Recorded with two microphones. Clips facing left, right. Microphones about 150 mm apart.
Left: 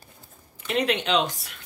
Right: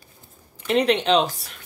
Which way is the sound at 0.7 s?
30° right (ahead or behind).